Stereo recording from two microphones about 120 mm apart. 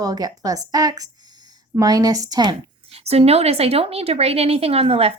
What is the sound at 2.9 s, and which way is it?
A woman's voice, 60° right (ahead or behind).